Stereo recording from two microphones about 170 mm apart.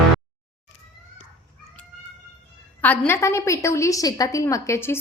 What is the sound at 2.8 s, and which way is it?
A woman's voice, 10° left (ahead or behind).